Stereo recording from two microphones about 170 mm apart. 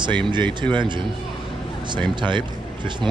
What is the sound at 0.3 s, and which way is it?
Speech, 25° right (ahead or behind).